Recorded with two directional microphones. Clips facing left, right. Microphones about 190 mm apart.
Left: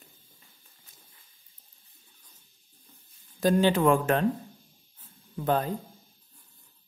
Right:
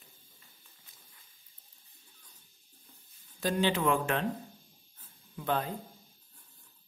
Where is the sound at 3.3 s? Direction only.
45° left (ahead or behind).